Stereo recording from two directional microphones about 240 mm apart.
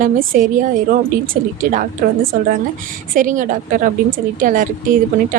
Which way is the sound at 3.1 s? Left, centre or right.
Right.